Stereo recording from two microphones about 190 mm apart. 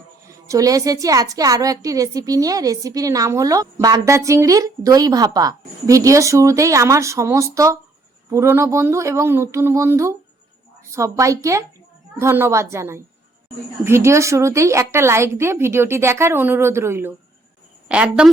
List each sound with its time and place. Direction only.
0.4 s a woman's voice: 15° right (ahead or behind)